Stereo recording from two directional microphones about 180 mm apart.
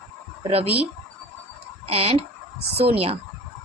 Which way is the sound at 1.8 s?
35° right (ahead or behind).